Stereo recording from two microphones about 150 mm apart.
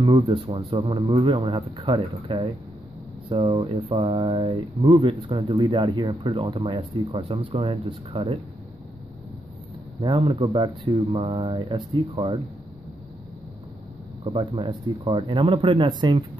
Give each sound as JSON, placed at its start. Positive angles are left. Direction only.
{"t": 0.0, "sound": "speech", "side_deg": -35}
{"t": 10.0, "sound": "speech", "side_deg": -40}
{"t": 14.2, "sound": "speech", "side_deg": -30}